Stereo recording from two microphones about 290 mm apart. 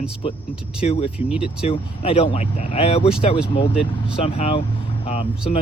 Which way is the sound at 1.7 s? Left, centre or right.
Centre.